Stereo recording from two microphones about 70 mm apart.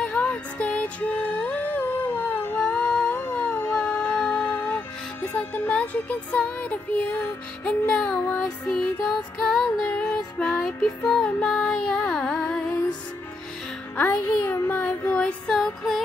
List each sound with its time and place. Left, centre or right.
0.0 s music: left
2.6 s humming: left
3.6 s music: left
9.4 s music: centre
9.8 s music: left
10.1 s music: centre
14.1 s child singing: left
15.1 s music: centre